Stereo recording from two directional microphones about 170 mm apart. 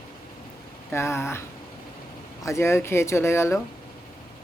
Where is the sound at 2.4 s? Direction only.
15° left (ahead or behind).